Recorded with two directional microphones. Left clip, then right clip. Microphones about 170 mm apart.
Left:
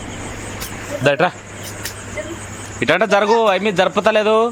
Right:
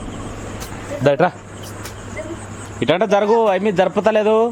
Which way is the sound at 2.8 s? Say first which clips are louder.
Left 1 dB; 20° right (ahead or behind).